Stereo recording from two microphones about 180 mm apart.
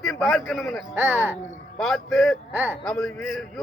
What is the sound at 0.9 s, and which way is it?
Speech, 10° right (ahead or behind).